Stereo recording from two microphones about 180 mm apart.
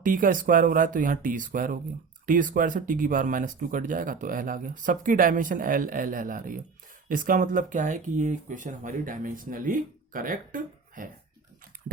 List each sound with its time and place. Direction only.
0.0 s speech: 50° right (ahead or behind)